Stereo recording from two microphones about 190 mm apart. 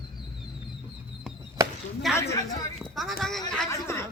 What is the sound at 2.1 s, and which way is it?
Speech, 15° left (ahead or behind).